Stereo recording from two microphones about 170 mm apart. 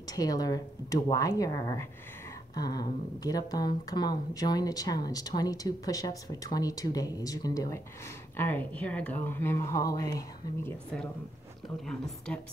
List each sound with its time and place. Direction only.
0.0 s speech: 20° left (ahead or behind)
11.8 s a woman's voice: 5° left (ahead or behind)